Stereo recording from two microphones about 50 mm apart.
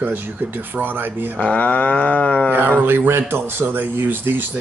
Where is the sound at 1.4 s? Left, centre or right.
Left.